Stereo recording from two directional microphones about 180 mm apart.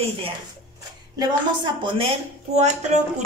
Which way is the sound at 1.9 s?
35° right (ahead or behind).